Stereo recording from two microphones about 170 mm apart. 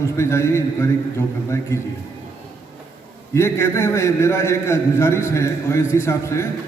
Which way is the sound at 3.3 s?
15° left (ahead or behind).